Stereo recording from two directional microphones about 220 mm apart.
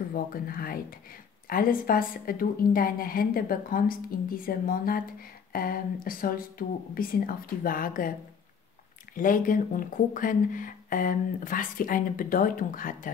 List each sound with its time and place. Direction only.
0.1 s speech: 40° left (ahead or behind)
9.1 s speech: 40° left (ahead or behind)